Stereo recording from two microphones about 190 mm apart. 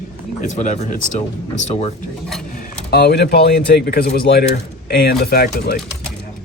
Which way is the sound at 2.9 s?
60° left (ahead or behind).